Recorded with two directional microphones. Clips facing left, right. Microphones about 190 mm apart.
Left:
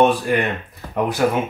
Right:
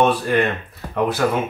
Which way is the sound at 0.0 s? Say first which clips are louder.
Left 1 dB; 15° left (ahead or behind).